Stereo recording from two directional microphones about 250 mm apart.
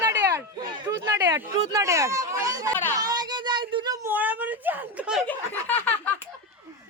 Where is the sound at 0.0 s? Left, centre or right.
Centre.